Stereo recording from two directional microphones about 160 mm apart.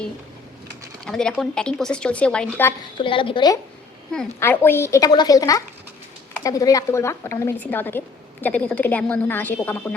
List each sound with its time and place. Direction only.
1.0 s speech: 5° left (ahead or behind)
3.0 s a woman's voice: 35° left (ahead or behind)
4.4 s a woman's voice: 15° left (ahead or behind)